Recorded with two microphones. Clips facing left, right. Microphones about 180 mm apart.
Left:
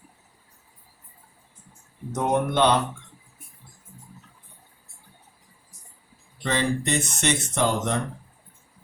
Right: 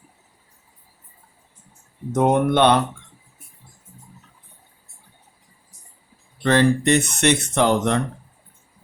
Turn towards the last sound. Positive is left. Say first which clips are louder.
# right 6 dB
turn(degrees=-65)  # may be behind; listen again after turning